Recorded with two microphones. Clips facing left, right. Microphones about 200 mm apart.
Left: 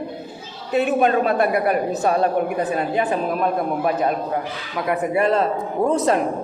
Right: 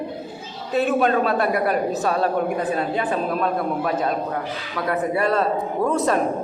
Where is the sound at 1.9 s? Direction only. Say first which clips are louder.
Left 2 dB; 15° left (ahead or behind).